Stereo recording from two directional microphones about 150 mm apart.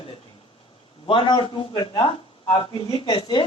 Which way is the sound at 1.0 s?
35° left (ahead or behind).